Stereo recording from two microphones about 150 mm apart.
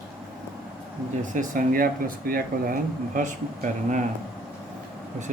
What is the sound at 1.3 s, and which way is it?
Speech, 65° right (ahead or behind).